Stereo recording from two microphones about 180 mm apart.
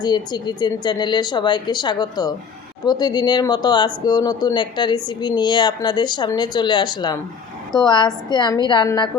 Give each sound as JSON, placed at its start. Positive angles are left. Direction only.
{"t": 0.0, "sound": "speech", "side_deg": 25}